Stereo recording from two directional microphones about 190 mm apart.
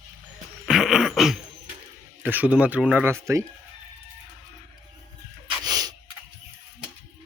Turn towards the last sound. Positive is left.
turn(degrees=-20)  # may be behind; listen again after turning